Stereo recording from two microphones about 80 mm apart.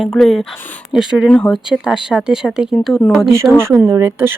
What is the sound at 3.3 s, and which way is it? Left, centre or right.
Speech, right.